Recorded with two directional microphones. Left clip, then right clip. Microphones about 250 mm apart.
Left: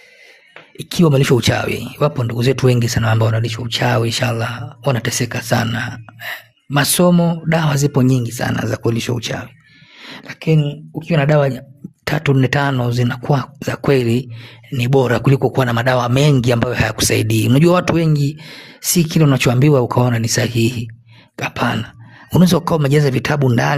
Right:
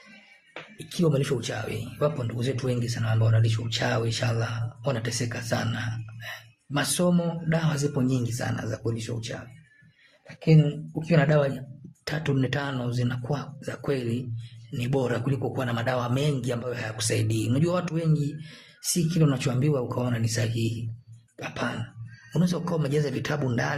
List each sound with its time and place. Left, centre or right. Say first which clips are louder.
0.9 s speech: left 12 dB; left